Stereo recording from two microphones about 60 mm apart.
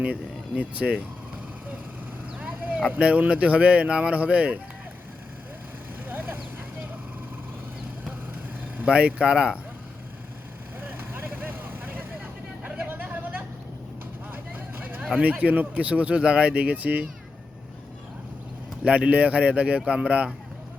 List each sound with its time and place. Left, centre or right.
0.0 s speech: right
2.4 s speech: right
6.1 s vehicle: right
8.8 s speech: right
10.8 s vehicle: right
15.2 s speech: right
18.9 s speech: right